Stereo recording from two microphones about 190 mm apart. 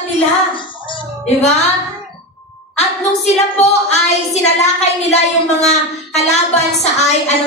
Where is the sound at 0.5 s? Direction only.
25° left (ahead or behind).